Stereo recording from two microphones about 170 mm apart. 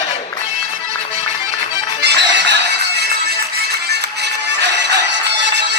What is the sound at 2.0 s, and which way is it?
Music, 90° right.